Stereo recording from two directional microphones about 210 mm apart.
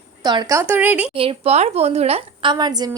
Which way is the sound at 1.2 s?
25° right (ahead or behind).